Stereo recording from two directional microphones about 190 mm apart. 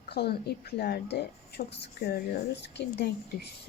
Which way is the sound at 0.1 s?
60° left (ahead or behind).